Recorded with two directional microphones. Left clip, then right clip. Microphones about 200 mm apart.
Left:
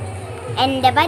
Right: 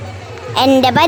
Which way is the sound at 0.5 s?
40° right (ahead or behind).